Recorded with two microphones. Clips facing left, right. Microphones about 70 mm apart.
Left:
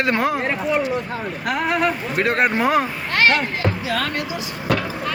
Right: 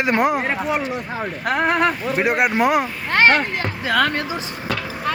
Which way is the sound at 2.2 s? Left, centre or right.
Centre.